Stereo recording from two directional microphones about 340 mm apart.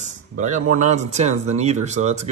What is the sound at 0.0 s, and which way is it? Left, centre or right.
Speech, right.